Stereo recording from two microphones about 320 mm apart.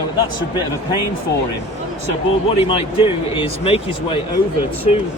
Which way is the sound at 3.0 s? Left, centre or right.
Centre.